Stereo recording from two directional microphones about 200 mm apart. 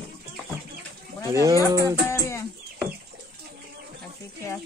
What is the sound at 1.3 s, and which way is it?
Speech, 15° right (ahead or behind).